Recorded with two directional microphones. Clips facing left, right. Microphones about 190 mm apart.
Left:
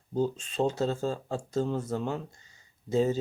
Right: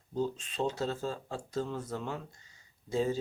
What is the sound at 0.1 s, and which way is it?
Speech, 35° left (ahead or behind).